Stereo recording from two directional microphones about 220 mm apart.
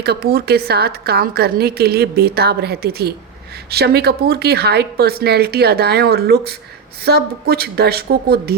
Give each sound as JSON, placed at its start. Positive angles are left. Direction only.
{"t": 0.0, "sound": "a woman's voice", "side_deg": -45}